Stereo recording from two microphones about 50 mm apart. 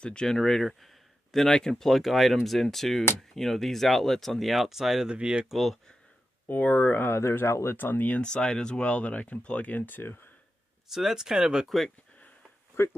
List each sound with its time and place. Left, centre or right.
0.0 s speech: centre
5.1 s speech: centre
5.5 s speech: centre
6.4 s speech: left
6.9 s speech: left
7.7 s speech: left
8.2 s speech: centre; by 10.3 s left
10.9 s speech: centre
11.6 s speech: centre
12.8 s speech: left